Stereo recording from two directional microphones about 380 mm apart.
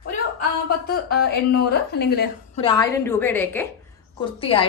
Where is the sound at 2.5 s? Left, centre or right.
Centre.